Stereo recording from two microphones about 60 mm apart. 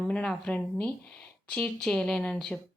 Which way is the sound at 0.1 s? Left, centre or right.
Centre.